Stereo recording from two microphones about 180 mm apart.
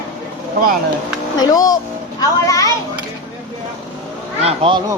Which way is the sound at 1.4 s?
20° left (ahead or behind).